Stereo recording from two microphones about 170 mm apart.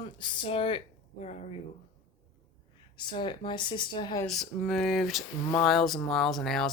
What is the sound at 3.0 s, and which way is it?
Speech, 25° left (ahead or behind).